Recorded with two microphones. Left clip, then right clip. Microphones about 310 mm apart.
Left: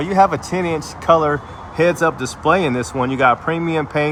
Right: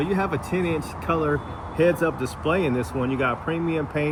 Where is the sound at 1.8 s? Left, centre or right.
Left.